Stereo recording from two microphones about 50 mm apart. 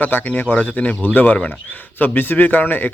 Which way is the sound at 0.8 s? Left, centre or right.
Left.